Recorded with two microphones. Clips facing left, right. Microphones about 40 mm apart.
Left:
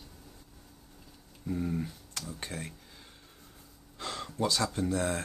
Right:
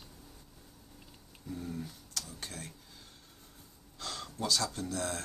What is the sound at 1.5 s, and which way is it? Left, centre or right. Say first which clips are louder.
Speech: left 7 dB; left.